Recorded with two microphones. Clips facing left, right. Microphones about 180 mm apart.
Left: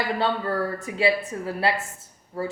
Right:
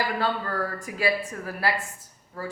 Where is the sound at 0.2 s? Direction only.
25° left (ahead or behind).